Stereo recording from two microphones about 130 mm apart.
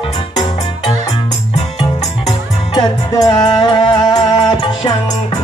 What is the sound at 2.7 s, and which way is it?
Music, 35° left (ahead or behind).